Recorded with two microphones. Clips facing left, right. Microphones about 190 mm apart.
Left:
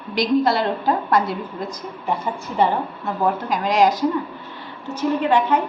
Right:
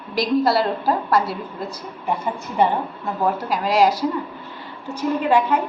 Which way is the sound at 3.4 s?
5° right (ahead or behind).